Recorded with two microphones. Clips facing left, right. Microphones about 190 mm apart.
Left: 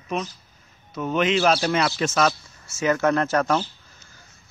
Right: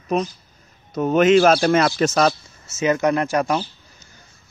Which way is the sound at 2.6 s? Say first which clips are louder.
Right 2 dB; 20° right (ahead or behind).